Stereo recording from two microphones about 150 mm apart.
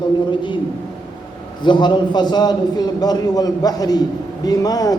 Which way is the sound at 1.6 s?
30° left (ahead or behind).